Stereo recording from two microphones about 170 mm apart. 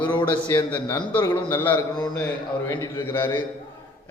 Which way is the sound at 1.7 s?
25° left (ahead or behind).